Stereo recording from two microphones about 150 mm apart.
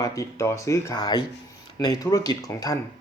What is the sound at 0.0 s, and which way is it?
Speech, 20° left (ahead or behind).